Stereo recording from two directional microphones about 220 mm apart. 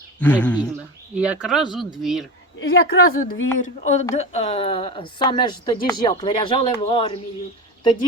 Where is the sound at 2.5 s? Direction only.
50° left (ahead or behind).